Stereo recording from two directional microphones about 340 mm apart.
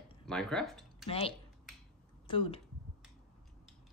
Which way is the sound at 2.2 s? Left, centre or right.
Centre.